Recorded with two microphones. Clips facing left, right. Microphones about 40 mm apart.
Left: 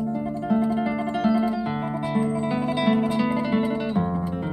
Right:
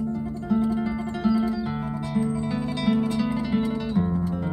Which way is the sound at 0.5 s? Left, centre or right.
Centre.